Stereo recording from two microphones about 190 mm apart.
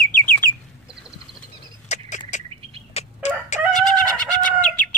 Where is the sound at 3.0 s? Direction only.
35° left (ahead or behind).